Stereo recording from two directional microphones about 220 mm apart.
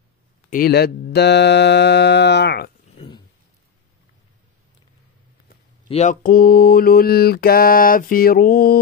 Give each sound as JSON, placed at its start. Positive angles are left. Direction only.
{"t": 0.5, "sound": "speech", "side_deg": 45}
{"t": 3.0, "sound": "a sound", "side_deg": 25}
{"t": 5.9, "sound": "mantra", "side_deg": 30}